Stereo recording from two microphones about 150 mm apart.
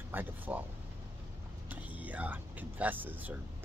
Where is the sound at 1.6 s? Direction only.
10° right (ahead or behind).